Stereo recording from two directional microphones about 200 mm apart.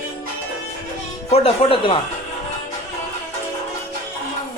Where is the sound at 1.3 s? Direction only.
25° left (ahead or behind).